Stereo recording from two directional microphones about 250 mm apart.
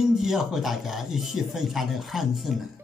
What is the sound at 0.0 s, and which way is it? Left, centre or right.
Speech, centre.